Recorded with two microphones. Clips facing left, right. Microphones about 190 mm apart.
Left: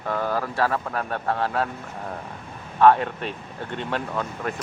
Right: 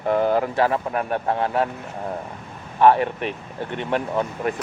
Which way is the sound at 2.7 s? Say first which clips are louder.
Right 1 dB; 15° right (ahead or behind).